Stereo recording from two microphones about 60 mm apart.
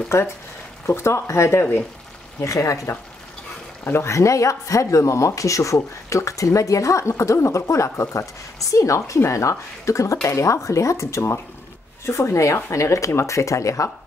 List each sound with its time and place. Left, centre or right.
0.1 s speech: left
2.4 s speech: left
4.0 s speech: left